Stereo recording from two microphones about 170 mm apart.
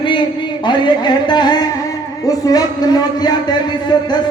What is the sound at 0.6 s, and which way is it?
Speech, 25° left (ahead or behind).